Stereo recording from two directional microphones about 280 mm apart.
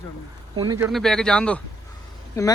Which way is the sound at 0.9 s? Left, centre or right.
Centre.